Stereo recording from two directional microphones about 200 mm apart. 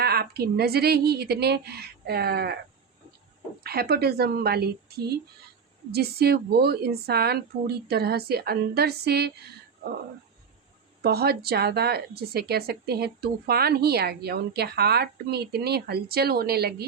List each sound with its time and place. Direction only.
0.0 s a woman's voice: 50° right (ahead or behind)
3.6 s a woman's voice: 50° right (ahead or behind)
11.0 s a woman's voice: 50° right (ahead or behind)